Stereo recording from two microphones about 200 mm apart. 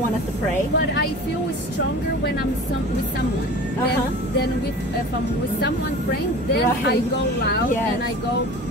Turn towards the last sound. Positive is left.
turn(degrees=55)  # may be behind; listen again after turning